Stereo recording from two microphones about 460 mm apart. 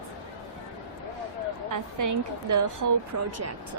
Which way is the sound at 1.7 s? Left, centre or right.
Right.